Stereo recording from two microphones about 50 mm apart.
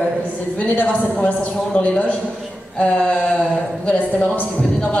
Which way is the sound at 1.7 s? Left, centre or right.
Left.